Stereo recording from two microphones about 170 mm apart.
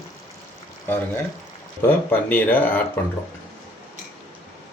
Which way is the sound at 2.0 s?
10° left (ahead or behind).